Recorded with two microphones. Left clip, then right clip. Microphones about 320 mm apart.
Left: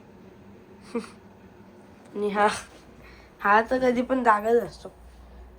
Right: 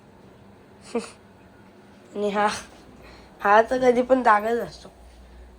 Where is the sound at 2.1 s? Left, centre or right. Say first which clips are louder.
Even; centre.